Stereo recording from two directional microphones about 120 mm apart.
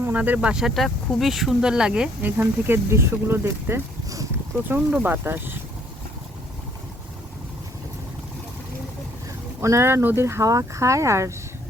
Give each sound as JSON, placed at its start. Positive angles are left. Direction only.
{"t": 0.0, "sound": "speech", "side_deg": -15}
{"t": 9.6, "sound": "speech", "side_deg": -25}